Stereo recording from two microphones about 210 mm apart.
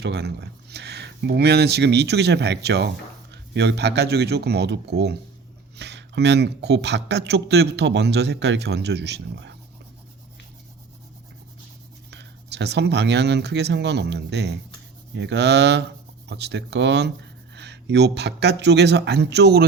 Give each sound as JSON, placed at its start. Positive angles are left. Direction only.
{"t": 0.0, "sound": "speech", "side_deg": -50}
{"t": 12.1, "sound": "speech", "side_deg": -55}